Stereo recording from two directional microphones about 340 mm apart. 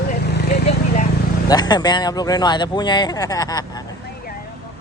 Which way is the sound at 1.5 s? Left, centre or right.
Centre.